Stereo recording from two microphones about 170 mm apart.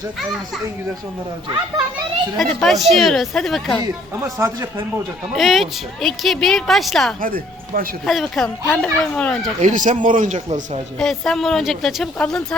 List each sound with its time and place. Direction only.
2.4 s a woman's voice: centre (ahead or behind)
4.2 s speech: 15° right (ahead or behind)
5.3 s a woman's voice: centre (ahead or behind)
7.2 s speech: 55° right (ahead or behind)
8.0 s a woman's voice: centre (ahead or behind)
9.6 s speech: 45° right (ahead or behind)
11.0 s a woman's voice: centre (ahead or behind)